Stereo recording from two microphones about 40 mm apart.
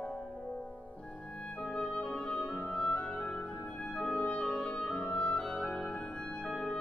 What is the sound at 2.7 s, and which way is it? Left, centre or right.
Clarinet, left.